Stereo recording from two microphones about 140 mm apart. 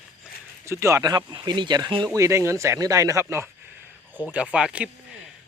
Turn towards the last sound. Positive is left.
turn(degrees=-5)  # may be behind; listen again after turning